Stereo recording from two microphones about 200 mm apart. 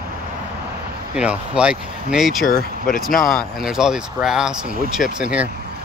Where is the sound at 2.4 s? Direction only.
45° left (ahead or behind).